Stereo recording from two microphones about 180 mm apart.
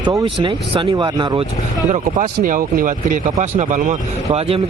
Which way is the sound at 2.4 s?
50° right (ahead or behind).